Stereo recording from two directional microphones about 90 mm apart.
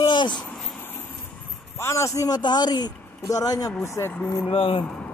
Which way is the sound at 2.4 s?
50° left (ahead or behind).